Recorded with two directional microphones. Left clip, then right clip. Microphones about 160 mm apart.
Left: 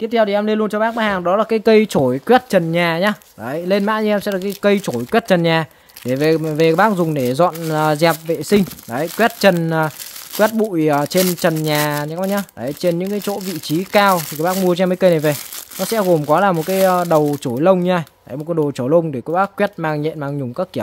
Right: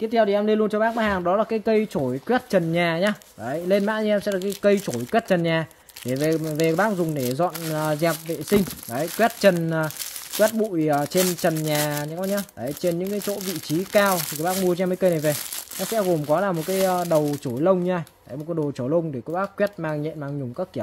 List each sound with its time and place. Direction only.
0.0 s speech: 35° left (ahead or behind)
1.6 s speech: 60° left (ahead or behind)
2.7 s speech: 35° left (ahead or behind)
16.0 s speech: 65° left (ahead or behind)